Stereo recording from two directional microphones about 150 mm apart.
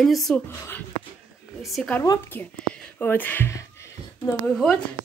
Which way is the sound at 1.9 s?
15° left (ahead or behind).